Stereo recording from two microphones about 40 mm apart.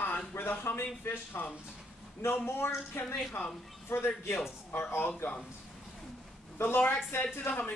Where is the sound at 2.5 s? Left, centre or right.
Left.